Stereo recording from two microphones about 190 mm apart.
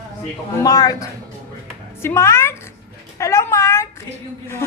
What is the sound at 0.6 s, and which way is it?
A woman's voice, 20° left (ahead or behind).